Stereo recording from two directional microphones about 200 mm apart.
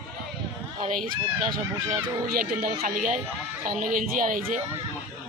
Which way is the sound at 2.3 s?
45° right (ahead or behind).